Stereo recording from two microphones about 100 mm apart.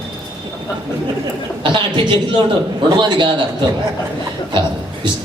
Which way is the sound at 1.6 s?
55° right (ahead or behind).